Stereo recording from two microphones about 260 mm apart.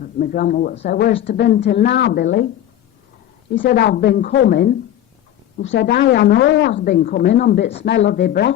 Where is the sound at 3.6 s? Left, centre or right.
Left.